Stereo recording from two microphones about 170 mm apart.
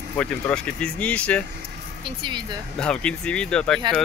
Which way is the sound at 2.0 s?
25° right (ahead or behind).